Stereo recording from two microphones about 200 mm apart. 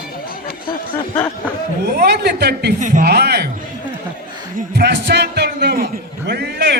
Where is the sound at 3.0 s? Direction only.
55° right (ahead or behind).